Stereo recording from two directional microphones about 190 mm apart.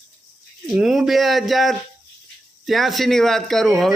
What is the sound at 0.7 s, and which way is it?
Speech, centre (ahead or behind).